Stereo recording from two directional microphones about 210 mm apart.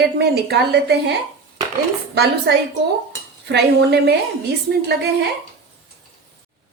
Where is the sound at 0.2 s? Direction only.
50° right (ahead or behind).